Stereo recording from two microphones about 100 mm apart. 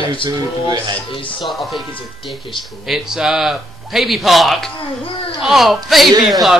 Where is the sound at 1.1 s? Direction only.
60° left (ahead or behind).